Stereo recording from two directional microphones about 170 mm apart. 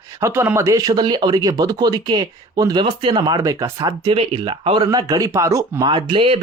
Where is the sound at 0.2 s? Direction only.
15° right (ahead or behind).